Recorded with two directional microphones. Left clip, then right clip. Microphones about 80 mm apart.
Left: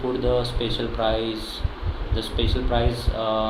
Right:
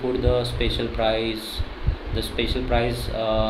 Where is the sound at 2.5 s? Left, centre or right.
Right.